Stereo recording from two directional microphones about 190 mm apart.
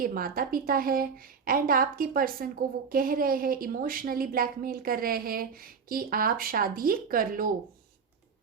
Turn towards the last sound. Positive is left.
turn(degrees=-50)  # may be behind; listen again after turning